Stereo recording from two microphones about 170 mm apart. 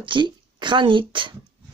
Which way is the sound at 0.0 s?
30° right (ahead or behind).